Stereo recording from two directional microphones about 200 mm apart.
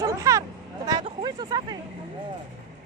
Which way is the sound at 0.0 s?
15° right (ahead or behind).